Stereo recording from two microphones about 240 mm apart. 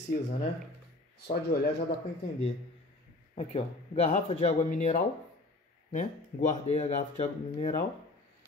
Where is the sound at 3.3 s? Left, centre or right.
Left.